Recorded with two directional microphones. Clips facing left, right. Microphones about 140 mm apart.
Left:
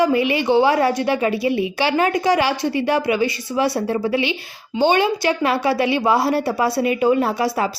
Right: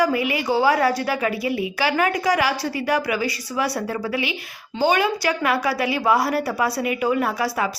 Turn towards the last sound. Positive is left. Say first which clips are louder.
# left 3 dB
turn(degrees=25)  # may be behind; listen again after turning